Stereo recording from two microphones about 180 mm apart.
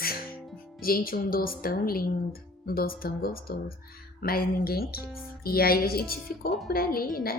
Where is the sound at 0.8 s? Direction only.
55° left (ahead or behind).